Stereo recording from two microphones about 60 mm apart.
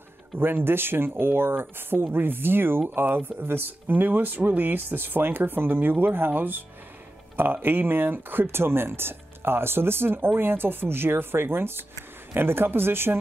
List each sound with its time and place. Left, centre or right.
0.4 s speech: right